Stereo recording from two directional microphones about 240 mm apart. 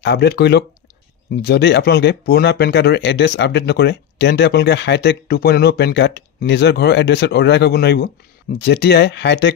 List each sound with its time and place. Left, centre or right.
0.0 s speech: left